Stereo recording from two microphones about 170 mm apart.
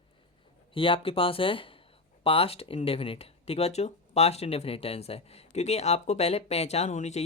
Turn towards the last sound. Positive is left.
turn(degrees=45)  # may be behind; listen again after turning